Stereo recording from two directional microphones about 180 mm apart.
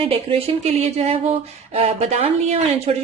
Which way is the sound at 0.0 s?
30° right (ahead or behind).